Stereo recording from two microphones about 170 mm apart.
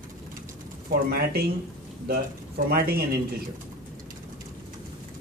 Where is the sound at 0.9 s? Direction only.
65° right (ahead or behind).